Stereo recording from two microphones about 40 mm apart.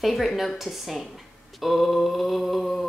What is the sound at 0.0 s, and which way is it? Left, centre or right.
A woman's voice, centre.